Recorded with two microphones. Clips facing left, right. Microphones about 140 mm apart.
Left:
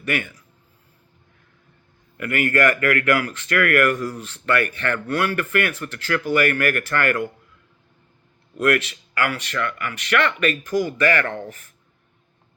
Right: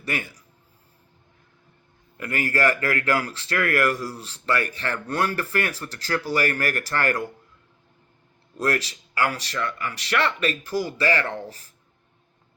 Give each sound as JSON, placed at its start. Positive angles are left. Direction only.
{"t": 0.0, "sound": "speech", "side_deg": -35}
{"t": 2.1, "sound": "speech", "side_deg": -35}
{"t": 8.5, "sound": "speech", "side_deg": -35}